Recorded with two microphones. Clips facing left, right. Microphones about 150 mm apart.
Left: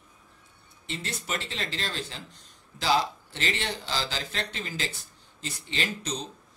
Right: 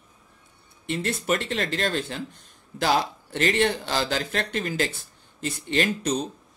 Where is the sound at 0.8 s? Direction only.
55° right (ahead or behind).